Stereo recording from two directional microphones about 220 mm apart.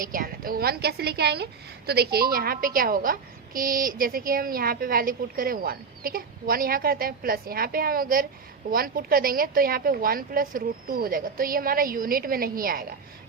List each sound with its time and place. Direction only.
0.0 s a woman's voice: 40° right (ahead or behind)